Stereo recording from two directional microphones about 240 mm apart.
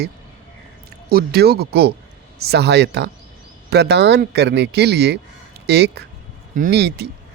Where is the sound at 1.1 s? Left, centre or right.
Right.